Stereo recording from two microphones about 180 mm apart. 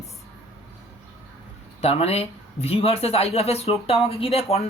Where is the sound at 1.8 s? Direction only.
35° left (ahead or behind).